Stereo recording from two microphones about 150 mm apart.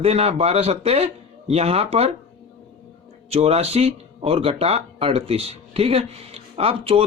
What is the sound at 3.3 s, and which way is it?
Speech, 40° right (ahead or behind).